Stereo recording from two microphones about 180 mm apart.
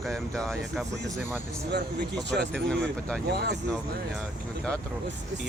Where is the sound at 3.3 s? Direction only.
65° right (ahead or behind).